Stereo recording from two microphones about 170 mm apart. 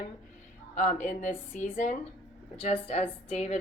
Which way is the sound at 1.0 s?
45° left (ahead or behind).